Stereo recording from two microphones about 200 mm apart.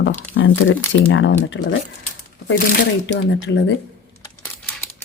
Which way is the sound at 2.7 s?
60° left (ahead or behind).